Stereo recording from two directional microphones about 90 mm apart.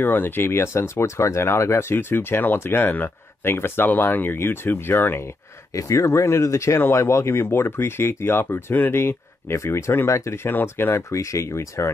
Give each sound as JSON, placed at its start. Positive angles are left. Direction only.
{"t": 0.0, "sound": "speech", "side_deg": 25}
{"t": 5.7, "sound": "speech", "side_deg": 35}